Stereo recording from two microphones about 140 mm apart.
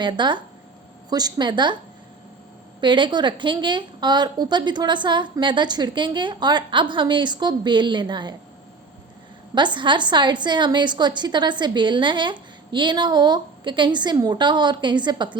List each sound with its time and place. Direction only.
0.0 s a woman's voice: 35° right (ahead or behind)
2.8 s a woman's voice: 35° right (ahead or behind)
9.6 s a woman's voice: 35° right (ahead or behind)